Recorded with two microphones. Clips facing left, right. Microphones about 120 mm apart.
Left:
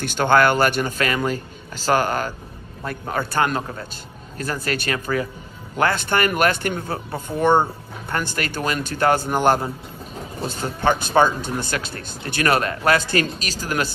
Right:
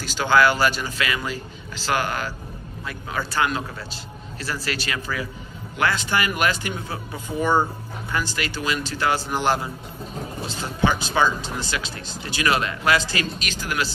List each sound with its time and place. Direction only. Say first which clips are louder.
0.0 s speech: left 2 dB; 55° left (ahead or behind)